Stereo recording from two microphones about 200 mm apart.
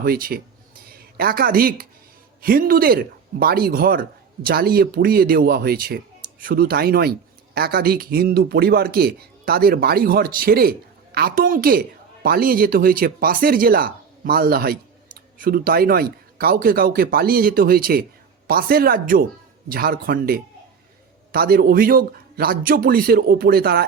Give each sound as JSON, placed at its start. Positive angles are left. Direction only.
{"t": 0.0, "sound": "speech", "side_deg": -45}